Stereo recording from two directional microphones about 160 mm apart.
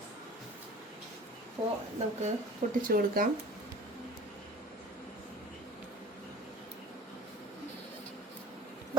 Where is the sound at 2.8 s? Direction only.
65° right (ahead or behind).